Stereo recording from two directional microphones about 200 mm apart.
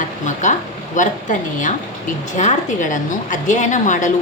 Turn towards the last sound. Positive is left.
turn(degrees=40)  # may be behind; listen again after turning